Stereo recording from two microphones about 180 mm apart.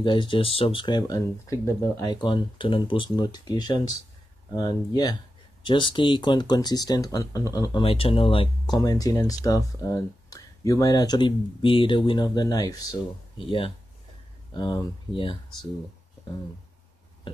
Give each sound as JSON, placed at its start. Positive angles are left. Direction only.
{"t": 0.0, "sound": "speech", "side_deg": 25}
{"t": 8.8, "sound": "speech", "side_deg": 20}